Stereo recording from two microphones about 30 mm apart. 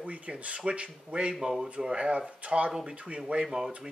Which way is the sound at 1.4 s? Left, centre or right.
Right.